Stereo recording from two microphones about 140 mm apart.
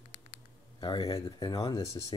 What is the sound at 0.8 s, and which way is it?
Speech, 25° left (ahead or behind).